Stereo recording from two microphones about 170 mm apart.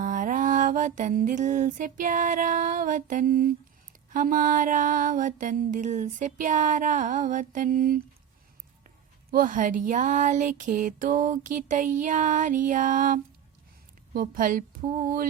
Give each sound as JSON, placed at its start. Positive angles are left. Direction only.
{"t": 0.0, "sound": "music", "side_deg": -50}
{"t": 9.3, "sound": "music", "side_deg": -50}
{"t": 14.1, "sound": "speech", "side_deg": -55}